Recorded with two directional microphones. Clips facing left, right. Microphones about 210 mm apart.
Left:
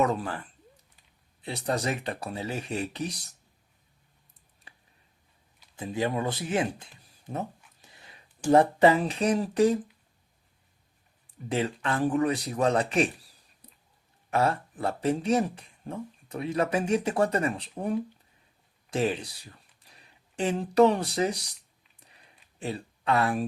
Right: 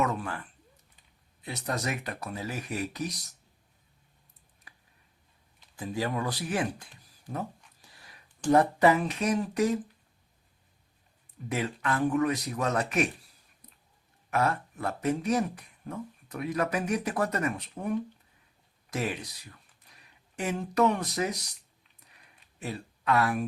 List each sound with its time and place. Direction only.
0.0 s a man's voice: 35° left (ahead or behind)
1.4 s speech: 30° left (ahead or behind)
4.7 s a sound: 30° left (ahead or behind)
5.7 s speech: 20° left (ahead or behind)
7.8 s a sound: 20° left (ahead or behind)
8.4 s a man's voice: 30° left (ahead or behind)
11.4 s a man's voice: 30° left (ahead or behind)
13.6 s whispering: 30° left (ahead or behind)
14.3 s a man's voice: 30° left (ahead or behind)
22.5 s speech: 30° left (ahead or behind)